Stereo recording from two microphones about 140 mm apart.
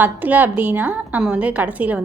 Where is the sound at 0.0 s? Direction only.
10° right (ahead or behind).